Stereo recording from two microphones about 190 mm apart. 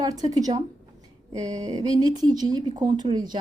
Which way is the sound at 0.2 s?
20° right (ahead or behind).